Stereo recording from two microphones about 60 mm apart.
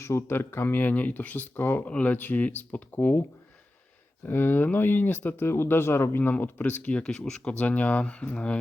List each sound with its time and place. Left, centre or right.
0.0 s speech: left
0.3 s speech: left
4.3 s speech: left
6.2 s speech: left
7.0 s speech: centre
7.6 s speech: left